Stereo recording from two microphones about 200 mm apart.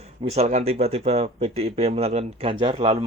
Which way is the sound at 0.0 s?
30° right (ahead or behind).